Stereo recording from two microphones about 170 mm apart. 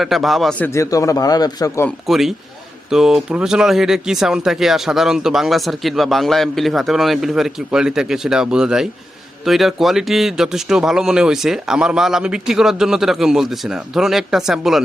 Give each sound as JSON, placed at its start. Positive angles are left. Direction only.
{"t": 0.0, "sound": "speech", "side_deg": 0}
{"t": 0.7, "sound": "a man's voice", "side_deg": 20}
{"t": 2.0, "sound": "speech", "side_deg": 0}